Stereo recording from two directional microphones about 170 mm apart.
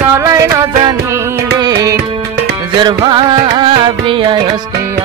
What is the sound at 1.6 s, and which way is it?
Music, 25° right (ahead or behind).